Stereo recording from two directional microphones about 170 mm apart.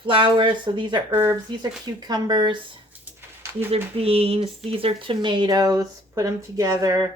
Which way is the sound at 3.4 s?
15° right (ahead or behind).